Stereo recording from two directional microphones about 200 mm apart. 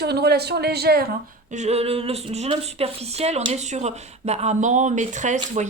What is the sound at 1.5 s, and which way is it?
A woman's voice, 35° right (ahead or behind).